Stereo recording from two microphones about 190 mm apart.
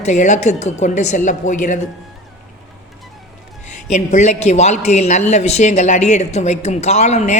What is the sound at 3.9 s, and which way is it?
Speech, 40° left (ahead or behind).